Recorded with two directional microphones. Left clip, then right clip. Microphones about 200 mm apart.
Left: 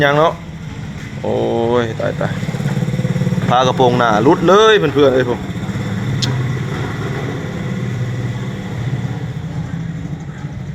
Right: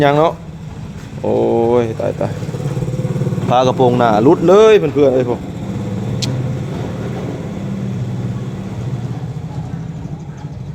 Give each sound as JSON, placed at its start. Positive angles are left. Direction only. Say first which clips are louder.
{"t": 0.0, "sound": "speech", "louder": "even", "side_deg": -15}
{"t": 3.5, "sound": "speech", "louder": "even", "side_deg": -20}